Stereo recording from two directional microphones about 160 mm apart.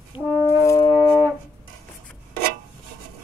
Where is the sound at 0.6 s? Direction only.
20° left (ahead or behind).